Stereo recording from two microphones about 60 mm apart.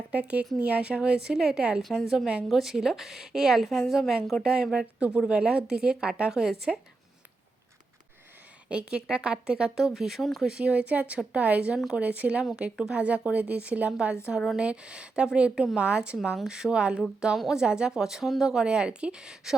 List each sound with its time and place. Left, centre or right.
0.1 s a woman's voice: right
1.8 s a woman's voice: centre
8.7 s a woman's voice: centre
17.3 s a woman's voice: centre
17.6 s a woman's voice: centre